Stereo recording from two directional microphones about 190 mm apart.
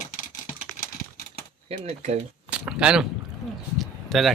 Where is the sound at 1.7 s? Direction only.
35° right (ahead or behind).